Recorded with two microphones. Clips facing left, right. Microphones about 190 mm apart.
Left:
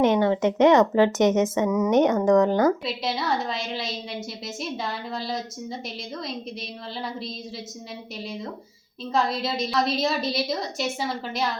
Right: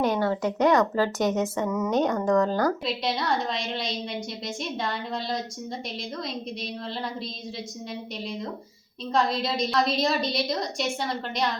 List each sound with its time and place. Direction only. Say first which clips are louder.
0.0 s a woman's voice: left 4 dB; 20° left (ahead or behind)
2.8 s a woman's voice: even; centre (ahead or behind)